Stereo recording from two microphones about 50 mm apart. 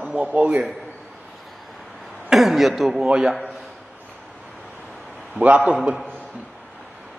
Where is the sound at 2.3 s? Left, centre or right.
Centre.